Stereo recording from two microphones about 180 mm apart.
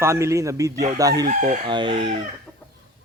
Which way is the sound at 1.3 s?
45° right (ahead or behind).